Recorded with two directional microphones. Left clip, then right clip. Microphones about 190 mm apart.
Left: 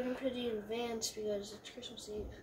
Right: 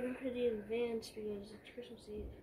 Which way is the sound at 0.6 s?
15° left (ahead or behind).